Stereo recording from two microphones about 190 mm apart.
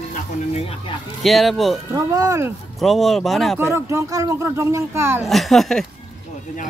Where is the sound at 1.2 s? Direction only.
Centre (ahead or behind).